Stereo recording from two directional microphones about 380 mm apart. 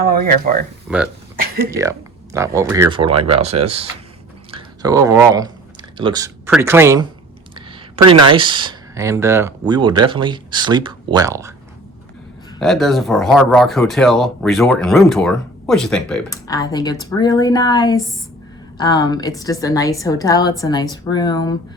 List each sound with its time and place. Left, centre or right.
0.0 s speech: right
0.9 s speech: centre
8.2 s speech: centre
12.5 s a woman's voice: centre